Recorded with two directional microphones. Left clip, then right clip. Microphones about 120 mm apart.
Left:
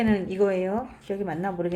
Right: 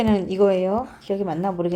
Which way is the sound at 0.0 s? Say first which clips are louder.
Right 5 dB; 60° right (ahead or behind).